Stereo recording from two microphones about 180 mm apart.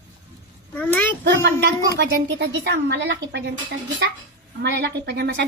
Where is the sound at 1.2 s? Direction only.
70° right (ahead or behind).